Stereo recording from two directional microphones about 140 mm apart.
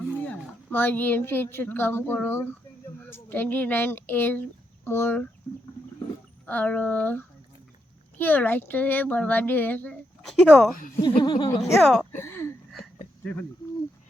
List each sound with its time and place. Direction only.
0.3 s a woman's voice: 15° left (ahead or behind)
6.4 s speech: 10° left (ahead or behind)
10.8 s speech: 80° left
11.2 s speech: 35° left (ahead or behind)
11.8 s speech: 5° left (ahead or behind)
12.1 s speech: 15° left (ahead or behind)